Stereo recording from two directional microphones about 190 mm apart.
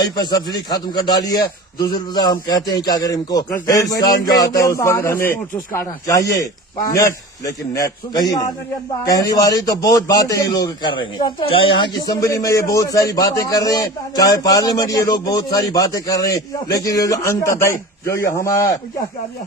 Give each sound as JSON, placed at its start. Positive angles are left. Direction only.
{"t": 0.0, "sound": "a man's voice", "side_deg": 20}